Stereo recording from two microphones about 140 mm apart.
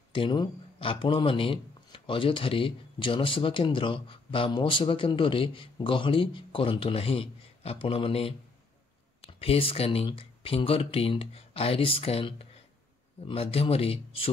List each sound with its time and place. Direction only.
0.1 s a man's voice: 35° left (ahead or behind)